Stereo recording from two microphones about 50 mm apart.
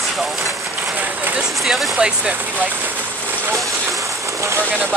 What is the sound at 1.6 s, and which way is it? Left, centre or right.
Speech, centre.